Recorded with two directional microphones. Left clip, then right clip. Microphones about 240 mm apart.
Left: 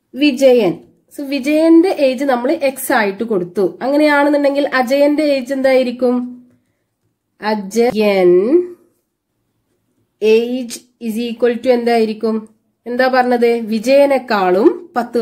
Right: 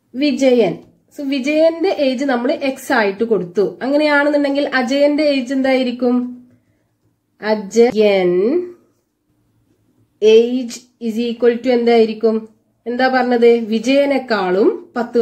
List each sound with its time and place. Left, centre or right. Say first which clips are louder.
0.1 s a woman's voice: left 4 dB; left
7.4 s a woman's voice: right 2 dB; left
10.2 s a woman's voice: right 2 dB; left